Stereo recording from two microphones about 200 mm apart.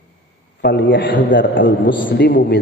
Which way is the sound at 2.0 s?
55° left (ahead or behind).